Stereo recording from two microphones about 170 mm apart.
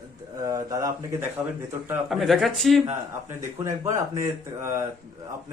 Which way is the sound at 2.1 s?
Centre (ahead or behind).